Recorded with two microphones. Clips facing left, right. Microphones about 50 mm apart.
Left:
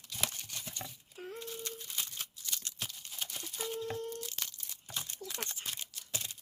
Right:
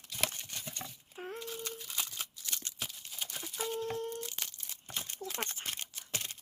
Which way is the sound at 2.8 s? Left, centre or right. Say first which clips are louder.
Even; centre.